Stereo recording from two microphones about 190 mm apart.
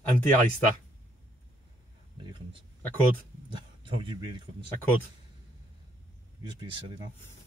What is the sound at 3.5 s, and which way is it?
Speech, 25° right (ahead or behind).